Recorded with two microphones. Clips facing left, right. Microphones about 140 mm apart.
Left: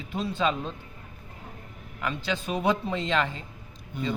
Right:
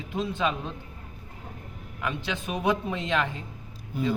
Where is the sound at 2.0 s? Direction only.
15° right (ahead or behind).